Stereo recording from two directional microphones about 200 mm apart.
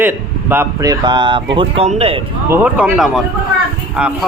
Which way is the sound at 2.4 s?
10° right (ahead or behind).